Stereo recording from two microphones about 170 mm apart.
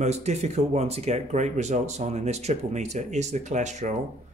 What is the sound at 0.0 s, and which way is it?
Speech, 40° right (ahead or behind).